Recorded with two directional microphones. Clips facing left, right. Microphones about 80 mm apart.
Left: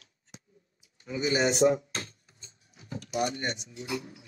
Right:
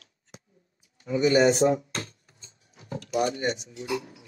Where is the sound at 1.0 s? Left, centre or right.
Right.